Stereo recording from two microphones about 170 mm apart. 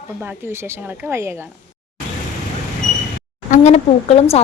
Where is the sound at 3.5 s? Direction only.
40° left (ahead or behind).